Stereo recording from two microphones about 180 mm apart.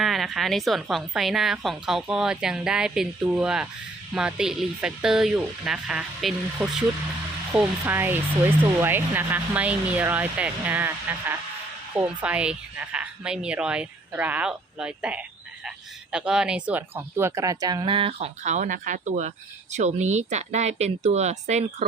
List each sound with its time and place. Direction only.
0.0 s a woman's voice: centre (ahead or behind); by 21.8 s 40° right (ahead or behind)